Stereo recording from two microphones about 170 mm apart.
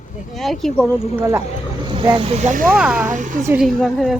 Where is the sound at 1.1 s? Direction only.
15° right (ahead or behind).